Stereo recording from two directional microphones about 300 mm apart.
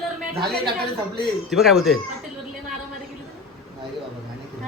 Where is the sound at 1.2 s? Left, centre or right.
Centre.